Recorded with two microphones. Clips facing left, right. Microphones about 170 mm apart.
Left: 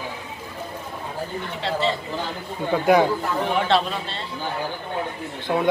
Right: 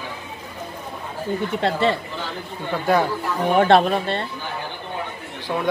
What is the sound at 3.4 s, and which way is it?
Speech, 50° right (ahead or behind).